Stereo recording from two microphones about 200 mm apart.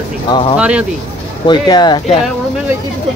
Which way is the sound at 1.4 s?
20° left (ahead or behind).